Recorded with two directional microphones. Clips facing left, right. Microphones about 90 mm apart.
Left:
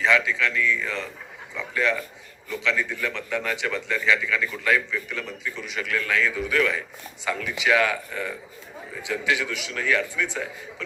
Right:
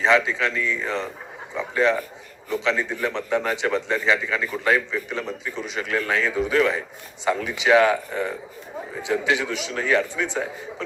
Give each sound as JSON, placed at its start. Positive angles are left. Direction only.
{"t": 0.0, "sound": "a man's voice", "side_deg": -30}